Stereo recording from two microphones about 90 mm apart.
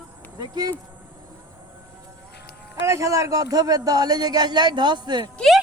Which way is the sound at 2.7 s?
35° right (ahead or behind).